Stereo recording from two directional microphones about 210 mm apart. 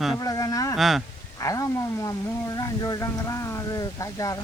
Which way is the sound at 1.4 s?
15° left (ahead or behind).